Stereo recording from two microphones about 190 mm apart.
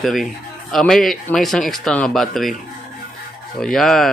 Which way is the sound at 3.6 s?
Centre (ahead or behind).